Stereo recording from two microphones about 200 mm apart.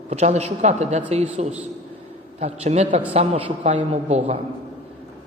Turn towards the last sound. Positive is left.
turn(degrees=-30)  # may be behind; listen again after turning